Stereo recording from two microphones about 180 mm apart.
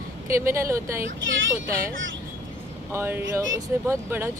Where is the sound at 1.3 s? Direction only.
90° right.